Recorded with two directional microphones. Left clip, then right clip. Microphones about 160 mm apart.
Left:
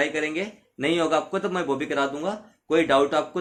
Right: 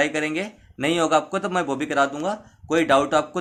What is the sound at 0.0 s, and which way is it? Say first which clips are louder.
Speech: right 2 dB; 40° right (ahead or behind).